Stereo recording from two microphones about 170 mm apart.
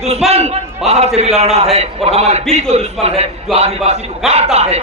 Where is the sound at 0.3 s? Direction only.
40° right (ahead or behind).